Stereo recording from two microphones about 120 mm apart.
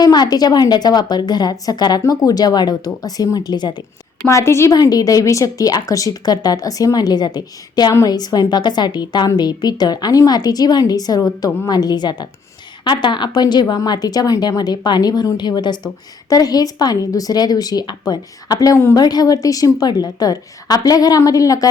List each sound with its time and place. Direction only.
0.0 s a woman's voice: 35° left (ahead or behind)
4.3 s a woman's voice: 25° left (ahead or behind)